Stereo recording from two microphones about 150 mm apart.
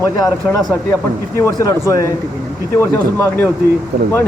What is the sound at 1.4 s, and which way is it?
Speech, 20° left (ahead or behind).